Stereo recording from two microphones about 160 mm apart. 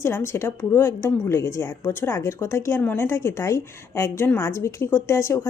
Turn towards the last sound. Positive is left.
turn(degrees=15)  # may be behind; listen again after turning